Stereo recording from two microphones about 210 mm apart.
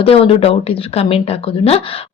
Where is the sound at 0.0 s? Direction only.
25° left (ahead or behind).